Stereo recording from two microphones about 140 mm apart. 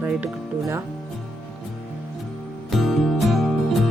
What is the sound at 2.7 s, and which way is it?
Music, centre (ahead or behind).